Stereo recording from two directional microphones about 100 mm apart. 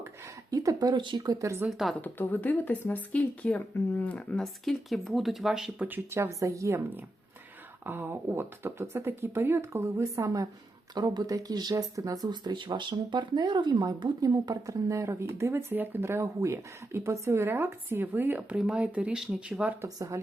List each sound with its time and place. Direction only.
0.5 s speech: 35° right (ahead or behind)
1.4 s speech: 30° right (ahead or behind)
2.0 s speech: 20° left (ahead or behind)
4.4 s speech: centre (ahead or behind)
5.8 s speech: 20° right (ahead or behind)
10.9 s speech: 45° right (ahead or behind); by 19.7 s 5° right (ahead or behind)
19.8 s speech: 30° right (ahead or behind)